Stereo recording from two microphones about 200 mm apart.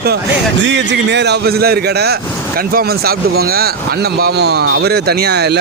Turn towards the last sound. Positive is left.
turn(degrees=-55)  # may be behind; listen again after turning